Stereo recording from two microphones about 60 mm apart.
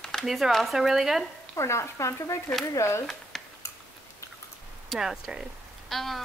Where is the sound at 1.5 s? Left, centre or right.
Left.